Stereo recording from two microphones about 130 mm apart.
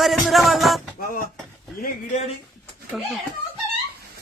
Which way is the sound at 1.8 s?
55° left (ahead or behind).